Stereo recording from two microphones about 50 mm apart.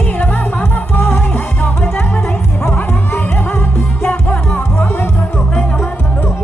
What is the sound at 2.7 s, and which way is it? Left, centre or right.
Music, left.